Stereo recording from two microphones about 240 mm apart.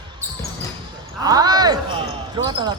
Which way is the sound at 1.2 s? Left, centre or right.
Centre.